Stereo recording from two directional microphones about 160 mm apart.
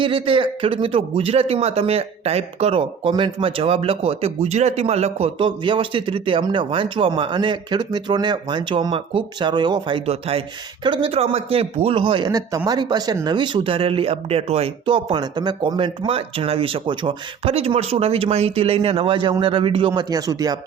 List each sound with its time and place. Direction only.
0.0 s speech: 35° right (ahead or behind)